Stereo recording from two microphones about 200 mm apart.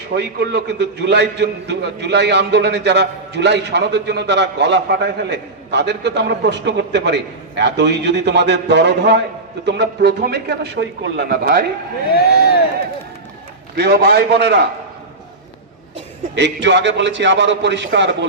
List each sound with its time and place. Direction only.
0.2 s a man's voice: 55° right (ahead or behind)
12.1 s speech: 50° left (ahead or behind)
13.7 s a man's voice: 55° right (ahead or behind)
16.3 s a man's voice: 60° right (ahead or behind)